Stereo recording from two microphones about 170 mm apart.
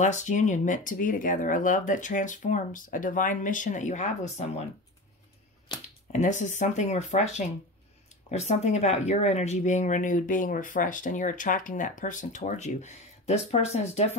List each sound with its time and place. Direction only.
0.0 s speech: 45° left (ahead or behind)
6.1 s speech: 45° left (ahead or behind)